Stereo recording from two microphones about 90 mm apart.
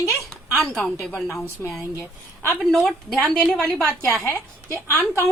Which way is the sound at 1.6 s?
25° left (ahead or behind).